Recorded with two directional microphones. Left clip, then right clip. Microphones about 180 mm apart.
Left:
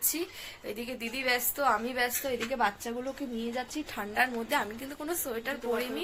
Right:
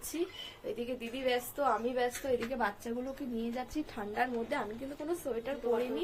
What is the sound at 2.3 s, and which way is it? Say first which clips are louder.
Speech: even; 25° left (ahead or behind).